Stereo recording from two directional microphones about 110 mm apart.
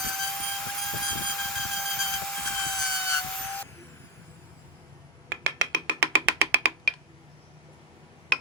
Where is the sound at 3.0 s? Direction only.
25° left (ahead or behind).